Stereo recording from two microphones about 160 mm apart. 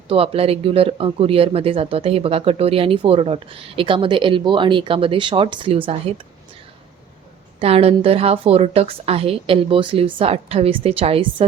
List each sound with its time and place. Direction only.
0.1 s speech: 35° right (ahead or behind)
7.6 s speech: 40° right (ahead or behind)